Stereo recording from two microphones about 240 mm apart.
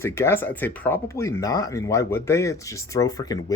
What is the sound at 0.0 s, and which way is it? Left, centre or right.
Speech, centre.